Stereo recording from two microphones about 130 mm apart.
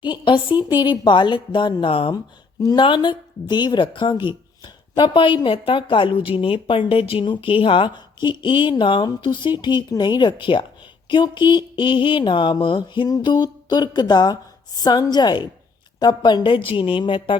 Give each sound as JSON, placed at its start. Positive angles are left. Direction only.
{"t": 0.0, "sound": "speech", "side_deg": 35}